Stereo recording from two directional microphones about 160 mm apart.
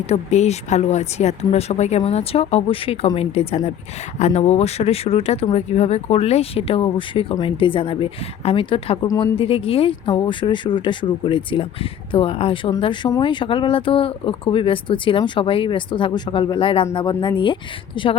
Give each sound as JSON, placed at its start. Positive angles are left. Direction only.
{"t": 0.1, "sound": "speech", "side_deg": 45}
{"t": 9.0, "sound": "a woman's voice", "side_deg": 25}
{"t": 9.4, "sound": "speech", "side_deg": 35}